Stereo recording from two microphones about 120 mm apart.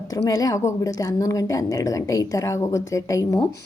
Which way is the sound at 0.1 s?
25° left (ahead or behind).